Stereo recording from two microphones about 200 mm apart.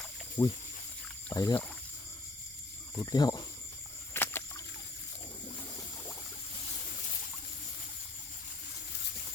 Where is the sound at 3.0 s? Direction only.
20° left (ahead or behind).